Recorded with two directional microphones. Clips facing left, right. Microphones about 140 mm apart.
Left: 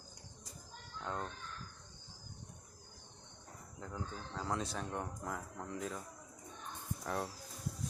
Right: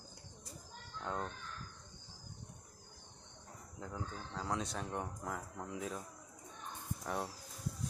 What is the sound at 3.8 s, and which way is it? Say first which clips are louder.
Speech: even; 5° right (ahead or behind).